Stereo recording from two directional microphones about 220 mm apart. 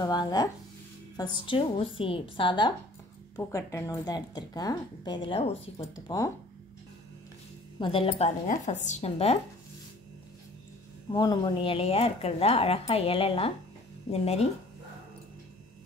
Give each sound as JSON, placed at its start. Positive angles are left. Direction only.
{"t": 0.0, "sound": "a woman's voice", "side_deg": 15}
{"t": 6.0, "sound": "a woman's voice", "side_deg": 15}
{"t": 7.8, "sound": "speech", "side_deg": 25}
{"t": 11.1, "sound": "speech", "side_deg": 20}